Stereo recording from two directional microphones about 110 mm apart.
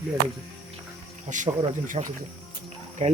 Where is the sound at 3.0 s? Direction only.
90° right.